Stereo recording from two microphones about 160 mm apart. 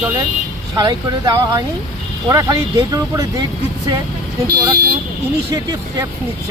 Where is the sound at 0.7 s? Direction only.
25° right (ahead or behind).